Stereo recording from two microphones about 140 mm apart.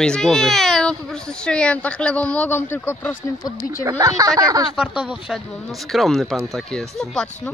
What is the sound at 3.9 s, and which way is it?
Speech, 25° right (ahead or behind).